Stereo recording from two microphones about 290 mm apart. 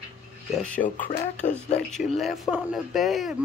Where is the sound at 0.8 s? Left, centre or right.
Left.